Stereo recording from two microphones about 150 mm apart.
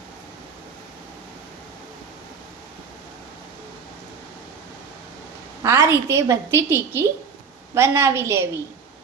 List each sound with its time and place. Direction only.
5.6 s a woman's voice: 20° right (ahead or behind)